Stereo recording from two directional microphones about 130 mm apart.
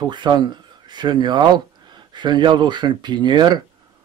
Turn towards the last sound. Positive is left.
turn(degrees=-35)  # may be behind; listen again after turning